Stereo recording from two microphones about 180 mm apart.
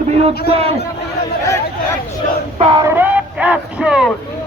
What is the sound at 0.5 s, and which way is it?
Speech, 35° right (ahead or behind).